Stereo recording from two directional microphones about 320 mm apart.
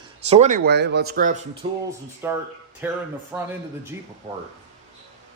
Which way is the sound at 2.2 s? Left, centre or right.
Centre.